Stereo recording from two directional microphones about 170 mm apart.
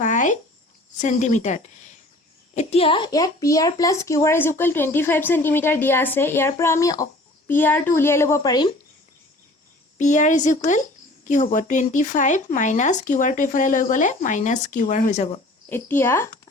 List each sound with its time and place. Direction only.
0.0 s a sound: 45° left (ahead or behind)
0.9 s a woman's voice: 45° left (ahead or behind); by 8.7 s 25° left (ahead or behind)
10.0 s speech: 45° left (ahead or behind)
15.7 s a woman's voice: 15° left (ahead or behind)